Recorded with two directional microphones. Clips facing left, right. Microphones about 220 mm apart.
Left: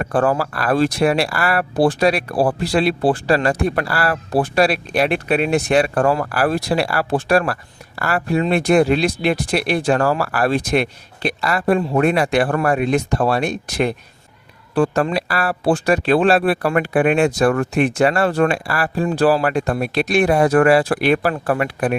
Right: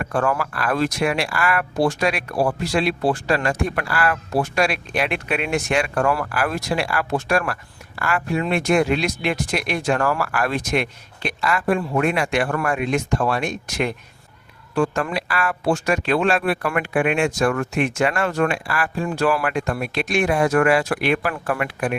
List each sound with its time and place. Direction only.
0.0 s speech: 35° left (ahead or behind)